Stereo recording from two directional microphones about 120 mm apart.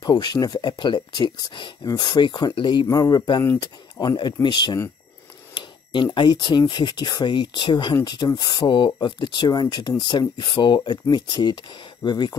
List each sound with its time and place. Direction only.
0.0 s speech: 35° left (ahead or behind)